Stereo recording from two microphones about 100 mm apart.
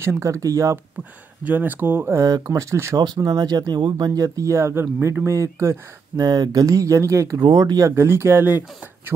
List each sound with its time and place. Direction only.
0.0 s speech: 30° right (ahead or behind)
1.4 s speech: 20° right (ahead or behind)
2.2 s speech: 35° right (ahead or behind)
7.4 s speech: 45° right (ahead or behind)
7.9 s speech: 25° right (ahead or behind)